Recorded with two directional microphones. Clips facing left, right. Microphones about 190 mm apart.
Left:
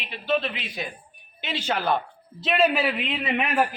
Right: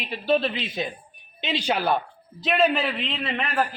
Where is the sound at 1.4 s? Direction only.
15° right (ahead or behind).